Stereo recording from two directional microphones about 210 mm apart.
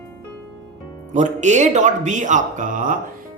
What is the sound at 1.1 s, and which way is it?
Speech, 35° right (ahead or behind).